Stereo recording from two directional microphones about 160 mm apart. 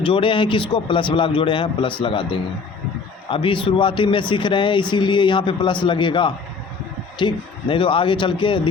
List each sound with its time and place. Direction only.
0.0 s speech: 30° left (ahead or behind)